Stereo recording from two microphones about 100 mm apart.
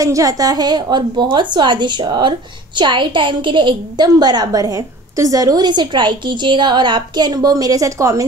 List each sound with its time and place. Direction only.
0.0 s a woman's voice: 35° right (ahead or behind)